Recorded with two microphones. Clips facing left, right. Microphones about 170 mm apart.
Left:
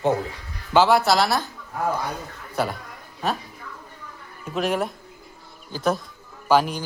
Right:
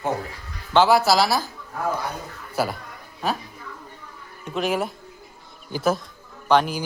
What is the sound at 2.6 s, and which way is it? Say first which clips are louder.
Speech: even; 5° right (ahead or behind).